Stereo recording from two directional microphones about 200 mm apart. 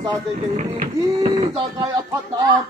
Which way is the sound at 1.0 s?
20° right (ahead or behind).